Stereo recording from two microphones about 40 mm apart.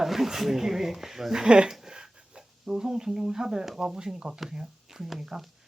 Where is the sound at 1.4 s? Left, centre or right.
Right.